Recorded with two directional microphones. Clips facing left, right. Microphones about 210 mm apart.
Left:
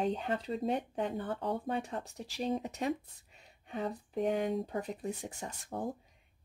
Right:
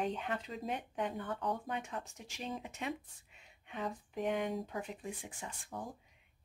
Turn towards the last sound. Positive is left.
turn(degrees=40)  # may be behind; listen again after turning